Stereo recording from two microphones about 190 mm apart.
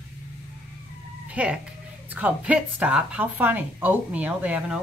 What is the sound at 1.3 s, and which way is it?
A woman's voice, 5° right (ahead or behind).